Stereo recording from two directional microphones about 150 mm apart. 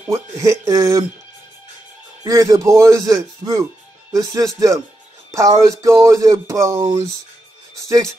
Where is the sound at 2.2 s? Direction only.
20° right (ahead or behind).